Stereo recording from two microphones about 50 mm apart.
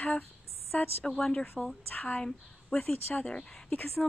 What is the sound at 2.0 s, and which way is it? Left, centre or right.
Speech, left.